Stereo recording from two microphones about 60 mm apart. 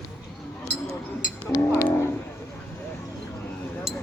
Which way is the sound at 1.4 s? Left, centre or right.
Centre.